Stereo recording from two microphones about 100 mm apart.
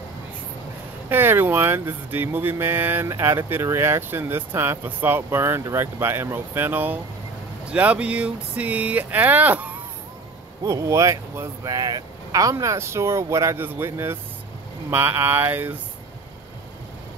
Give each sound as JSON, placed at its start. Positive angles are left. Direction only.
{"t": 1.0, "sound": "speech", "side_deg": -25}
{"t": 10.6, "sound": "speech", "side_deg": -30}